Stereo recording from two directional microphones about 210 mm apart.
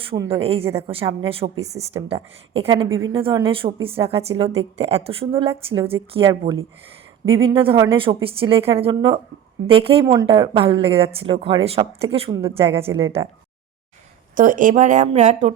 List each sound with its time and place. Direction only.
0.1 s a woman's voice: 20° right (ahead or behind)
0.9 s a woman's voice: 25° right (ahead or behind)
7.5 s a woman's voice: 25° right (ahead or behind)
12.9 s speech: 15° right (ahead or behind)
14.3 s speech: 40° right (ahead or behind)